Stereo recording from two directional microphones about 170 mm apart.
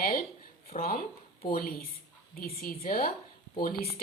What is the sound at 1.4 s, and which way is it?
A woman's voice, 60° left (ahead or behind).